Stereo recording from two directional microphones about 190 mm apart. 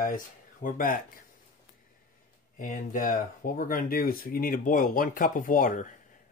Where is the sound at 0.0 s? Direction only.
45° left (ahead or behind).